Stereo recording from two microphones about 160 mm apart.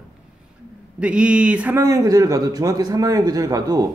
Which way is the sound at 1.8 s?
20° right (ahead or behind).